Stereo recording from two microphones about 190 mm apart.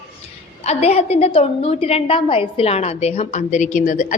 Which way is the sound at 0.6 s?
35° left (ahead or behind).